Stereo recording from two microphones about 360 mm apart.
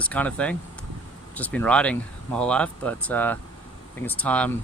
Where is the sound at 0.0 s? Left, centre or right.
Centre.